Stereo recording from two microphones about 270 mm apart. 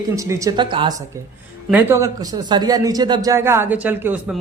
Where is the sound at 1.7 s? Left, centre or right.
Centre.